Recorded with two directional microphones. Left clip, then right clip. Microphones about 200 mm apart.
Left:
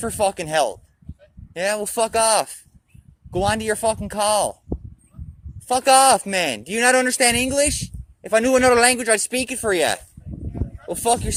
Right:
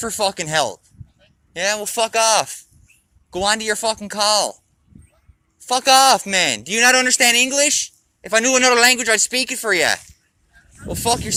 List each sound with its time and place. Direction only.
0.0 s speech: 20° left (ahead or behind)
5.6 s speech: 20° left (ahead or behind)
8.5 s speech: 40° left (ahead or behind)